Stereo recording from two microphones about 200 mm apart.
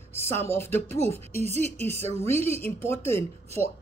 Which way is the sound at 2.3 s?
30° right (ahead or behind).